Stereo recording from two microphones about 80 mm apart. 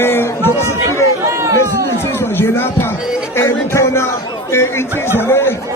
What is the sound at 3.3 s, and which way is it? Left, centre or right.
Music, left.